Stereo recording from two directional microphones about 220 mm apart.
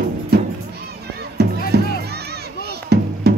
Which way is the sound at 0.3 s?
50° right (ahead or behind).